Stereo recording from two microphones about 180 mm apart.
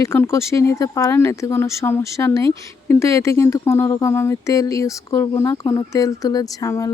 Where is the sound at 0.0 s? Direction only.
15° left (ahead or behind).